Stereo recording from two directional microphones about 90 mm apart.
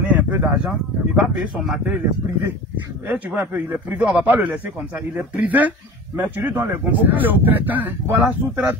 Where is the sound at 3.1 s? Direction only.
20° right (ahead or behind).